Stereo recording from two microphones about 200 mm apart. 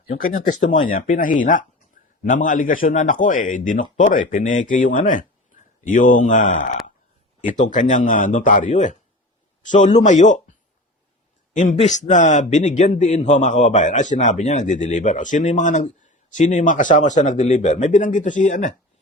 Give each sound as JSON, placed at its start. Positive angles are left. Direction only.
{"t": 0.1, "sound": "a man's voice", "side_deg": 45}
{"t": 11.5, "sound": "a man's voice", "side_deg": 40}